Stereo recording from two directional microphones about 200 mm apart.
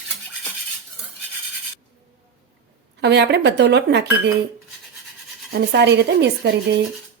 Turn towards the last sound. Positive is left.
turn(degrees=-60)  # may be behind; listen again after turning